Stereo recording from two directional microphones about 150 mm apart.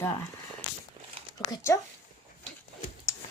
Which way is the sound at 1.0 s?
30° right (ahead or behind).